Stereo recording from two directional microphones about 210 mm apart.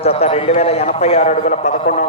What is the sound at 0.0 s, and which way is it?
A man's voice, 30° left (ahead or behind).